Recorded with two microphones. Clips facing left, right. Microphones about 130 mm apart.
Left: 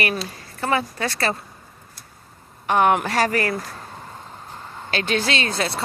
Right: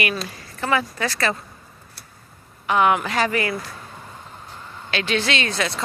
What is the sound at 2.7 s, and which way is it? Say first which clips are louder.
Speech: left 1 dB; 45° left (ahead or behind).